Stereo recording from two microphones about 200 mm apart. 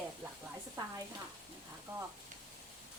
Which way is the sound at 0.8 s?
20° right (ahead or behind).